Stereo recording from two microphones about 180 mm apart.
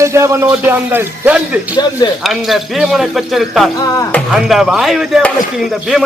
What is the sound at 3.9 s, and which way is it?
Speech, 15° left (ahead or behind).